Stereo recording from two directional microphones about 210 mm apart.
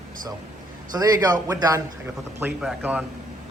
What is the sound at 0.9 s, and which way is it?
Speech, 20° right (ahead or behind).